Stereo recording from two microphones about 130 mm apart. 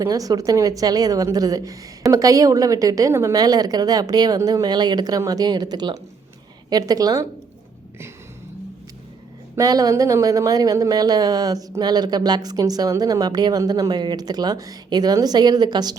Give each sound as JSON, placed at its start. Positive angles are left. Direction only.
{"t": 0.0, "sound": "speech", "side_deg": -25}
{"t": 9.6, "sound": "speech", "side_deg": -30}